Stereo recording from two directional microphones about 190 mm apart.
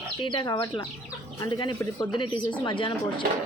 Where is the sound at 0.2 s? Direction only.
20° left (ahead or behind).